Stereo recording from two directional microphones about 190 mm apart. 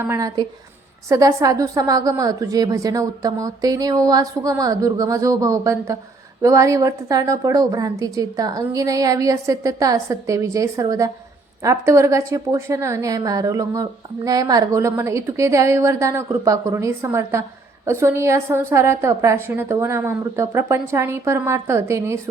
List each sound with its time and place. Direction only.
0.0 s a woman's voice: 15° right (ahead or behind)